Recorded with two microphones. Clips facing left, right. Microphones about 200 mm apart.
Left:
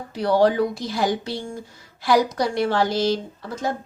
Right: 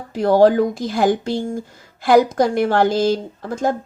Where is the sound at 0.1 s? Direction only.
45° right (ahead or behind).